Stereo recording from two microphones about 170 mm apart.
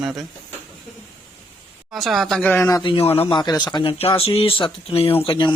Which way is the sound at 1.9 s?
Centre (ahead or behind).